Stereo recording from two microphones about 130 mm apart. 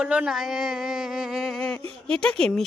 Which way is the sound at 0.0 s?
5° right (ahead or behind).